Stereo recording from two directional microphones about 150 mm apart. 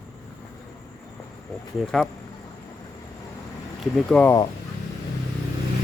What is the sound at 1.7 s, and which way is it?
Speech, 5° left (ahead or behind).